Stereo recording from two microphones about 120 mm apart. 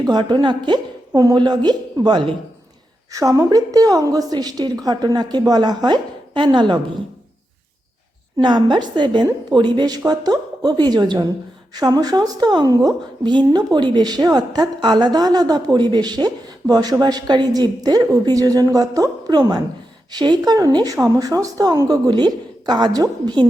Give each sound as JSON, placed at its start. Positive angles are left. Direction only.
{"t": 0.0, "sound": "a woman's voice", "side_deg": -35}
{"t": 3.1, "sound": "a woman's voice", "side_deg": -25}
{"t": 8.4, "sound": "a woman's voice", "side_deg": -35}